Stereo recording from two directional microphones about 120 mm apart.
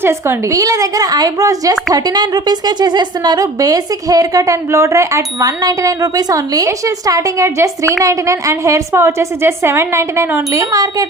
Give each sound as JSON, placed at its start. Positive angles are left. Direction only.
{"t": 0.0, "sound": "a woman's voice", "side_deg": -20}